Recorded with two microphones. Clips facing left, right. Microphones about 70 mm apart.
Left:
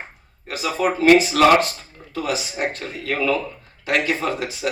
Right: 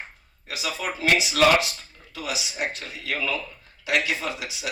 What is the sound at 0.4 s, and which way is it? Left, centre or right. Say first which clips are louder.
A man's voice: left 8 dB; left.